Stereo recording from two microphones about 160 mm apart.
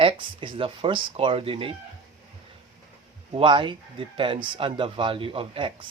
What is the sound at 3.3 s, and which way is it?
Speech, 30° right (ahead or behind).